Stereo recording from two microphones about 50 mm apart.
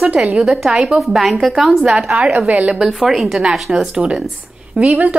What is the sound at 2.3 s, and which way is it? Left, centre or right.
Speech, right.